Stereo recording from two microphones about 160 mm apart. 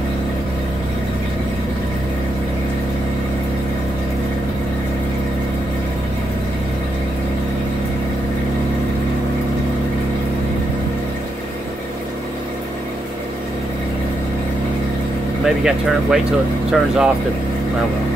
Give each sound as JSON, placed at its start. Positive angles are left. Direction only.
{"t": 15.4, "sound": "speech", "side_deg": -5}